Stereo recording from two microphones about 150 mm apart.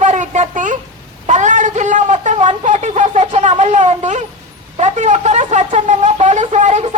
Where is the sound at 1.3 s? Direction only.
55° right (ahead or behind).